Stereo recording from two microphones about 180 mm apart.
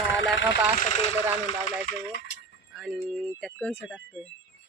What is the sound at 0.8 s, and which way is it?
Speech, 35° left (ahead or behind).